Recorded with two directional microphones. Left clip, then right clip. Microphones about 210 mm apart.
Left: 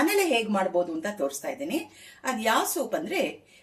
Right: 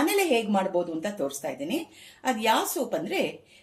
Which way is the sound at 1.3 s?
15° right (ahead or behind).